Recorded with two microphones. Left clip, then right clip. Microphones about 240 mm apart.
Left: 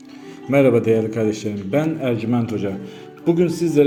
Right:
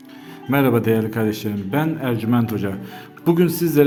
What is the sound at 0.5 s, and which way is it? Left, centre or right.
A man's voice, centre.